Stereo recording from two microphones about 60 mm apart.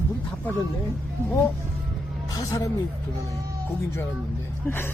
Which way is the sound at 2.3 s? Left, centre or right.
Left.